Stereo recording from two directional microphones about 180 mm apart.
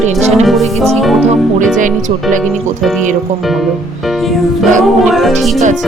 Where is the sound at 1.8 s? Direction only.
45° right (ahead or behind).